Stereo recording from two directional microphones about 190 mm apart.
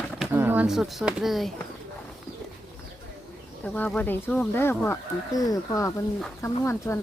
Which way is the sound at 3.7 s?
10° left (ahead or behind).